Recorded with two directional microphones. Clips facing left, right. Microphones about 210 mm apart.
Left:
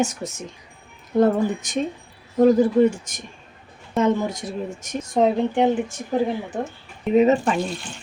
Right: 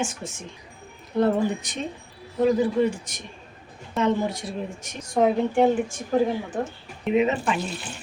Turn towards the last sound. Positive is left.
turn(degrees=40)  # may be behind; listen again after turning